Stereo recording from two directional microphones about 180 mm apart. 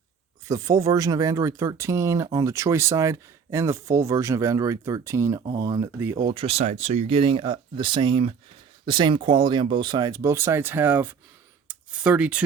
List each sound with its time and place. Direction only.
0.4 s speech: 20° right (ahead or behind)
6.2 s speech: 30° right (ahead or behind); by 12.4 s 5° right (ahead or behind)